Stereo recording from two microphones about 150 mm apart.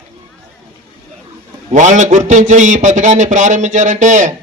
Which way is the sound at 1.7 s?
55° right (ahead or behind).